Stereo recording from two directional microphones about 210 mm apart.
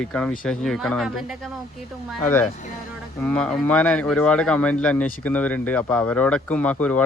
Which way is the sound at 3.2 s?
5° left (ahead or behind).